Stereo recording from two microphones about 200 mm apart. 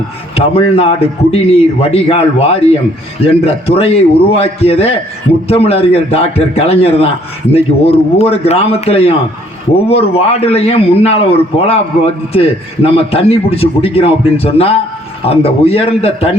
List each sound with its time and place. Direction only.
0.3 s a man's voice: 30° left (ahead or behind)